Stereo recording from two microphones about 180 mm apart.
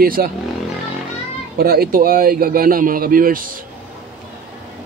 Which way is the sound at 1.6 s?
55° right (ahead or behind).